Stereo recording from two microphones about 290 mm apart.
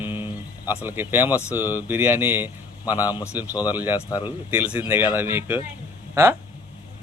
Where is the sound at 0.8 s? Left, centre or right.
Centre.